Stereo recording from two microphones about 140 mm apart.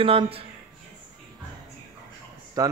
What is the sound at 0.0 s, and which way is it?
Speech, 40° right (ahead or behind).